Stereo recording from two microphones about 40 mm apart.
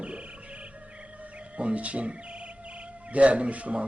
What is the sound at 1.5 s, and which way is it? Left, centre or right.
Speech, right.